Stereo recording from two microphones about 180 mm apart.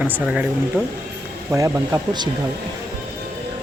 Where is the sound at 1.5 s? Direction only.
15° right (ahead or behind).